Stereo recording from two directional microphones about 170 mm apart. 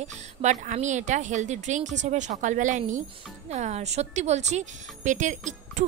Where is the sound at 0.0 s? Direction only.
45° right (ahead or behind).